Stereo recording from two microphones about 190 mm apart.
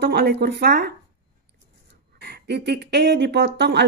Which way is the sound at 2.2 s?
60° right (ahead or behind).